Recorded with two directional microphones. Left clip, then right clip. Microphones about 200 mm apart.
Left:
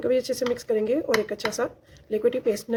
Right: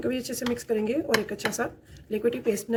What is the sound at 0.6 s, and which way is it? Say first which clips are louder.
Speech: left 2 dB; 40° left (ahead or behind).